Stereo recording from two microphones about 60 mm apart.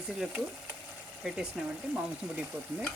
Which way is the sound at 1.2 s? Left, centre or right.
Centre.